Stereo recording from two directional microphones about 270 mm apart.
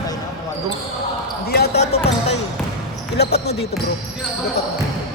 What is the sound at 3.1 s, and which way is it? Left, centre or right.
Basketball bounce, left.